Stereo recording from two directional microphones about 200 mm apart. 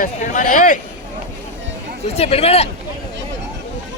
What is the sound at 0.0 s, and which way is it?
Speech, 40° left (ahead or behind).